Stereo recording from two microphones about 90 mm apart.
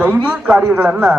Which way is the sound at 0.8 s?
5° left (ahead or behind).